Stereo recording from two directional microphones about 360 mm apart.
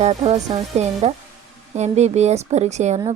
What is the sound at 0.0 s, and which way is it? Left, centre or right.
Speech, centre.